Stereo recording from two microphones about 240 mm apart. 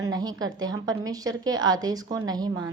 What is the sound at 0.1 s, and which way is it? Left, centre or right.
A woman's voice, centre.